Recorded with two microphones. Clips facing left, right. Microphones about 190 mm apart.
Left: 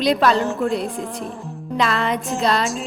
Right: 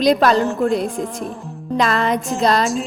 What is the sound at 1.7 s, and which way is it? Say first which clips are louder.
Speech: right 3 dB; 45° right (ahead or behind).